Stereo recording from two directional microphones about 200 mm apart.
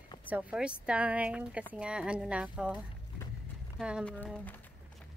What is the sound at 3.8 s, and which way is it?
Speech, centre (ahead or behind).